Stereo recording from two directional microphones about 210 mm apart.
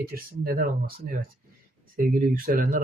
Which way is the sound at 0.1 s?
45° right (ahead or behind).